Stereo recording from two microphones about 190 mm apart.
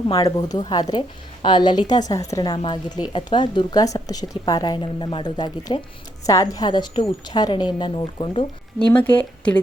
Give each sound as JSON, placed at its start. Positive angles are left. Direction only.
{"t": 0.1, "sound": "a woman's voice", "side_deg": 20}
{"t": 8.9, "sound": "speech", "side_deg": 10}